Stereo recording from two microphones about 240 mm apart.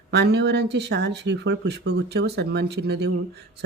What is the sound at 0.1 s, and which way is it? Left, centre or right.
Speech, right.